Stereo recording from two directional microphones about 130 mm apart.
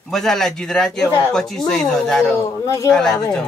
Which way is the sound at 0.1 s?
5° left (ahead or behind).